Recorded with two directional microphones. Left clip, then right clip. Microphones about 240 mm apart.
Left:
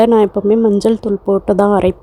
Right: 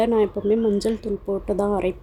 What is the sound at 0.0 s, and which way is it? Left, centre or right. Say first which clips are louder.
Speech: left 9 dB; left.